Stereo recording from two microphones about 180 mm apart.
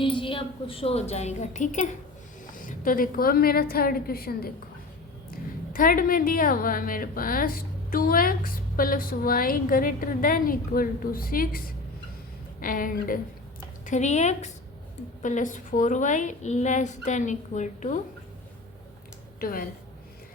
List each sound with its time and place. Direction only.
0.0 s a woman's voice: 30° left (ahead or behind); by 18.0 s 45° left (ahead or behind)
19.4 s speech: 55° left (ahead or behind)